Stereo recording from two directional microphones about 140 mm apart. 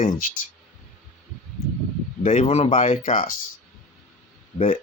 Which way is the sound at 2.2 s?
55° left (ahead or behind).